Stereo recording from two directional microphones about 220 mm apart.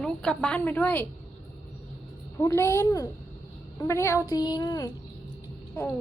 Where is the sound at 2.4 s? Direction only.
15° left (ahead or behind).